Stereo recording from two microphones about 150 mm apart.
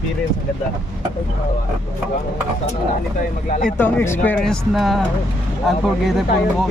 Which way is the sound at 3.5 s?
65° left (ahead or behind).